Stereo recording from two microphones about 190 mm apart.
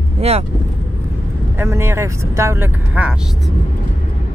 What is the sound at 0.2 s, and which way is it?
Speech, 35° right (ahead or behind).